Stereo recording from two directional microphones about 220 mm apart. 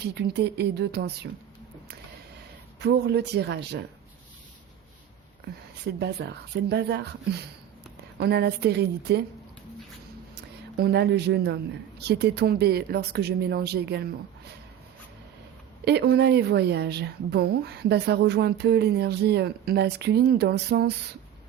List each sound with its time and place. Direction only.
0.0 s a woman's voice: 50° right (ahead or behind)
2.8 s a woman's voice: 50° right (ahead or behind)
5.8 s a woman's voice: 50° right (ahead or behind)
10.3 s a woman's voice: 50° right (ahead or behind)
15.8 s a woman's voice: 50° right (ahead or behind)